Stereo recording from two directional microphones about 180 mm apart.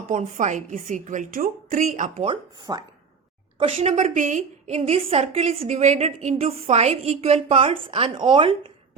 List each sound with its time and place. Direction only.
0.1 s a woman's voice: 45° right (ahead or behind)
2.3 s speech: 20° right (ahead or behind)
3.6 s a woman's voice: 35° right (ahead or behind)